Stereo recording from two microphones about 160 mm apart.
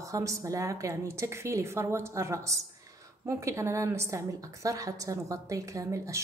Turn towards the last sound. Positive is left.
turn(degrees=-20)  # may be behind; listen again after turning